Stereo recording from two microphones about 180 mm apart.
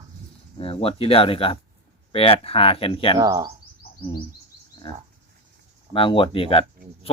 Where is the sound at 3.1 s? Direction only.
20° right (ahead or behind).